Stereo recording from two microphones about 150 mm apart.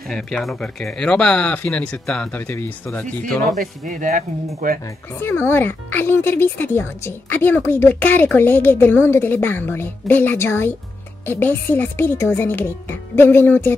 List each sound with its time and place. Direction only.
0.1 s speech: centre (ahead or behind)
3.5 s speech: 60° right (ahead or behind)
5.2 s speech: 15° left (ahead or behind)